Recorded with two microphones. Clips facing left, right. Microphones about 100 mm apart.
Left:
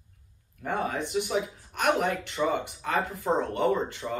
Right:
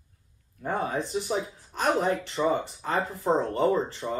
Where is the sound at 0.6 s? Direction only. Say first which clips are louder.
Right 1 dB; 35° right (ahead or behind).